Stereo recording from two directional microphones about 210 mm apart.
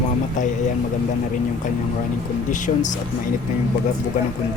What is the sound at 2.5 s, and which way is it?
Speech, 35° left (ahead or behind).